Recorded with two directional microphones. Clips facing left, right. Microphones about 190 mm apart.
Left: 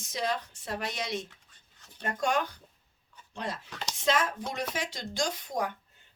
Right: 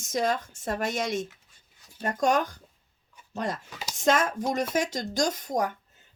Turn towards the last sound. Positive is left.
turn(degrees=-45)  # may be behind; listen again after turning